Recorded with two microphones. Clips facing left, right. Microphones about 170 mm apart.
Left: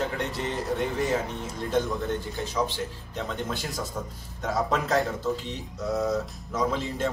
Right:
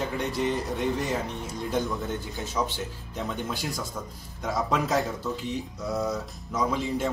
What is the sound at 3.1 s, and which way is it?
Speech, 5° right (ahead or behind).